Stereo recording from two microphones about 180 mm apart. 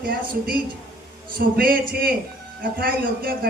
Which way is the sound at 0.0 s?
55° right (ahead or behind).